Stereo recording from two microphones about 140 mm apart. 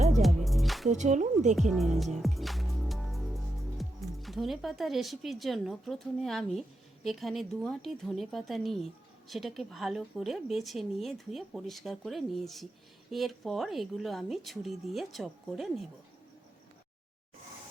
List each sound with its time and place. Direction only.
0.2 s music: centre (ahead or behind)
0.9 s speech: 60° right (ahead or behind)
1.7 s a woman's voice: centre (ahead or behind)
2.2 s music: centre (ahead or behind)
7.0 s a woman's voice: centre (ahead or behind)